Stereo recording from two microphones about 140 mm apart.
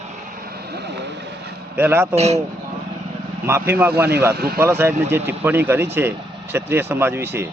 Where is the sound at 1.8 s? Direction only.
15° right (ahead or behind).